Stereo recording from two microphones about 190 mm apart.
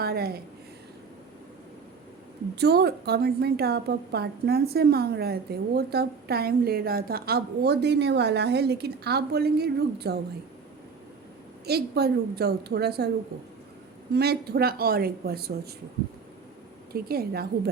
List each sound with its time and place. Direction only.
0.0 s a woman's voice: 55° right (ahead or behind)
2.6 s a woman's voice: 60° right (ahead or behind)
11.6 s a woman's voice: 55° right (ahead or behind)
14.1 s a woman's voice: 55° right (ahead or behind)
16.9 s a woman's voice: 55° right (ahead or behind)